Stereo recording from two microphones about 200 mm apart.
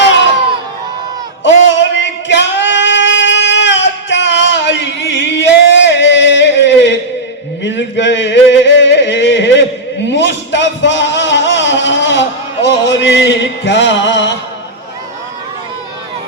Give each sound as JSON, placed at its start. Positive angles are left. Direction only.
{"t": 1.5, "sound": "singing", "side_deg": 65}
{"t": 7.6, "sound": "a sound", "side_deg": 65}
{"t": 12.6, "sound": "music", "side_deg": 65}